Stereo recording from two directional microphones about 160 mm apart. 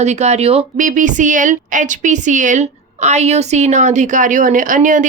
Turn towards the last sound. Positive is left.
turn(degrees=-55)  # may be behind; listen again after turning